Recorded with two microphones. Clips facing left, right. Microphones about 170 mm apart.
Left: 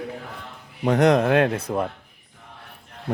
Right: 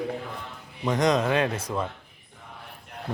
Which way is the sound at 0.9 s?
65° left (ahead or behind).